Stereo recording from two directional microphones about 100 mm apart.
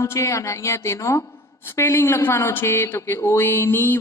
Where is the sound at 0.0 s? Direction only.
30° left (ahead or behind).